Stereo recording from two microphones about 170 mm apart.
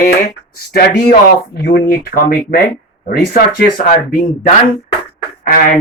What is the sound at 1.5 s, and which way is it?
Speech, 70° left (ahead or behind).